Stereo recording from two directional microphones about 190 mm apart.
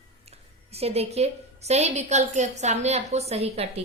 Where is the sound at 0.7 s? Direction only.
30° right (ahead or behind).